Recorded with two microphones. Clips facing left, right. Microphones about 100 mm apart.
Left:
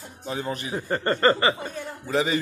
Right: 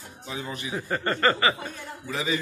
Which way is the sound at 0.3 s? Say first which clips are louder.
Left 4 dB; 45° left (ahead or behind).